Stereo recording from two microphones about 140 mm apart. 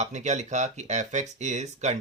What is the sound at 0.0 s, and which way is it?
Speech, 55° right (ahead or behind).